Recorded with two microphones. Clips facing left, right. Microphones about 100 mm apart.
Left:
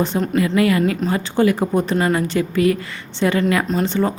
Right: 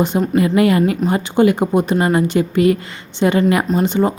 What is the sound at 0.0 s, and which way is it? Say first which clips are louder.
Speech: right 3 dB; 15° right (ahead or behind).